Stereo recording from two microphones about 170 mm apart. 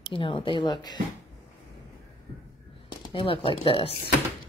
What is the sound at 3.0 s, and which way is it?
Speech, 30° left (ahead or behind).